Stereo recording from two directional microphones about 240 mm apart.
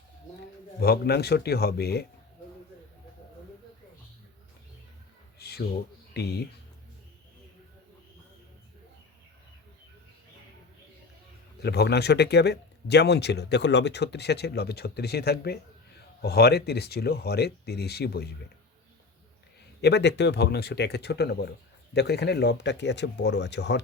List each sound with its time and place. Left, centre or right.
0.8 s speech: left
5.4 s a sound: left
6.1 s speech: left
11.6 s speech: left
19.8 s speech: left